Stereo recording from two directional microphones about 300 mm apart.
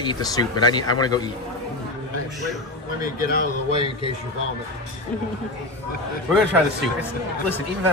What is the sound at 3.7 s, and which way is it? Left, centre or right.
Speech, centre.